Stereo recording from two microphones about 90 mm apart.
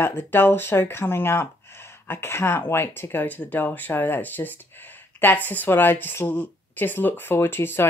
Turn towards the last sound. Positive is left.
turn(degrees=25)  # may be behind; listen again after turning